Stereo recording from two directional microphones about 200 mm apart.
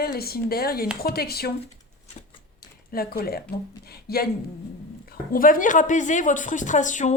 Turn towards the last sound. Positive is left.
turn(degrees=40)  # may be behind; listen again after turning